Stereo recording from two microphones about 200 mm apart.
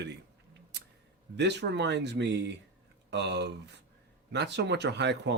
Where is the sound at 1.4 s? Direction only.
60° right (ahead or behind).